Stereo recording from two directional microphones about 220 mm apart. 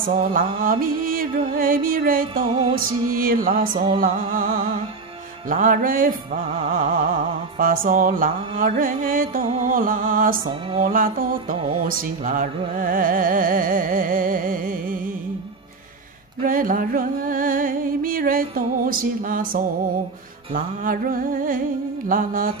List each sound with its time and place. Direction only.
0.0 s music: 40° right (ahead or behind)
16.4 s music: 40° right (ahead or behind)